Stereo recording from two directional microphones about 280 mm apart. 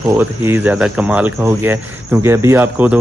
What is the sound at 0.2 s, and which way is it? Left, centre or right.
Speech, centre.